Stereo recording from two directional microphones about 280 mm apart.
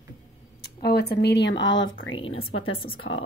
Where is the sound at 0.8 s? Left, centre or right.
Left.